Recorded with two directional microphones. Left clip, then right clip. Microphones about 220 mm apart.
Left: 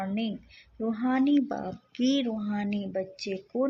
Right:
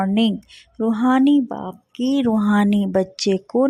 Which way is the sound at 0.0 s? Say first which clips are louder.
Right 13 dB; 50° right (ahead or behind).